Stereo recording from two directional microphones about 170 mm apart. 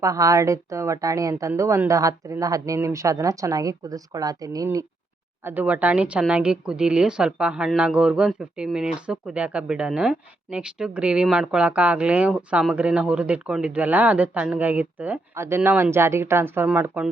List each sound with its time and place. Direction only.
0.0 s speech: 20° right (ahead or behind)
5.5 s a woman's voice: 10° right (ahead or behind)